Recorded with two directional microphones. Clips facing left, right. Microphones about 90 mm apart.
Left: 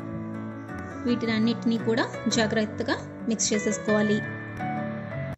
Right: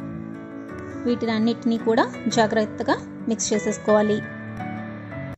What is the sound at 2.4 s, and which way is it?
Speech, 25° right (ahead or behind).